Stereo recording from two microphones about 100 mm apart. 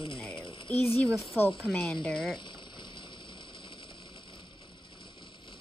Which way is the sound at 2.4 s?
50° left (ahead or behind).